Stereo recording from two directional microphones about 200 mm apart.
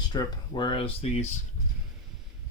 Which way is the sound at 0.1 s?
20° left (ahead or behind).